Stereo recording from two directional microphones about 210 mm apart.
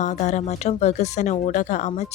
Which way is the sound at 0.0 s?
35° left (ahead or behind).